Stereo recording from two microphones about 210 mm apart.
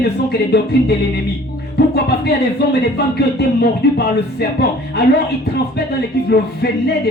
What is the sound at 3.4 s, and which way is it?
Speech, 50° left (ahead or behind).